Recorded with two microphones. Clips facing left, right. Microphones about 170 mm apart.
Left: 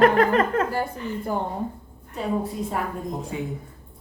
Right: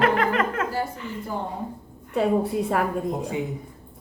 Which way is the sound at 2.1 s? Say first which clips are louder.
Right 5 dB; 65° right (ahead or behind).